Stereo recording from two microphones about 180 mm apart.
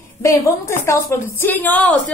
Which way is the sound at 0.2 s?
15° left (ahead or behind).